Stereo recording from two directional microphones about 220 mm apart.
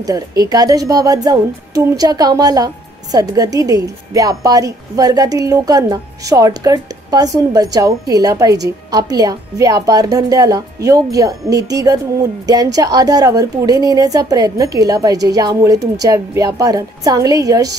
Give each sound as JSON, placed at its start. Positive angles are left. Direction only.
{"t": 0.0, "sound": "a woman's voice", "side_deg": -15}